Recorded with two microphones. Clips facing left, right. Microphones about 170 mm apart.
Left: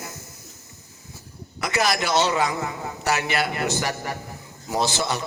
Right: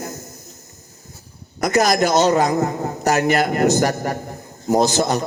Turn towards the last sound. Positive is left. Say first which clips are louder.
# right 7 dB
turn(degrees=-45)  # may be behind; listen again after turning